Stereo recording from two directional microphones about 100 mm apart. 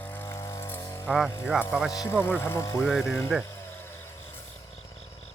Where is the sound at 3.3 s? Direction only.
5° right (ahead or behind).